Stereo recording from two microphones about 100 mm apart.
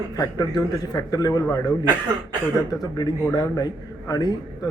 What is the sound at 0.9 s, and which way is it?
Speech, 40° left (ahead or behind).